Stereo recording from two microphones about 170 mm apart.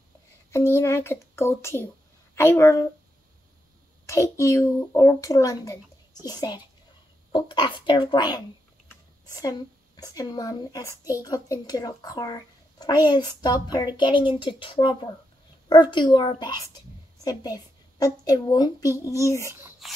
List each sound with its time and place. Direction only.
0.5 s a child's voice: 15° left (ahead or behind)
4.0 s a woman's voice: 15° left (ahead or behind)
19.8 s a sound: centre (ahead or behind)